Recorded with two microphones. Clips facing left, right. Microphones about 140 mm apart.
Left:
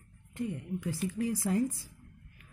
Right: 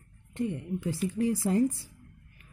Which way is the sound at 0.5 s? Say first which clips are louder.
Right 3 dB; 30° right (ahead or behind).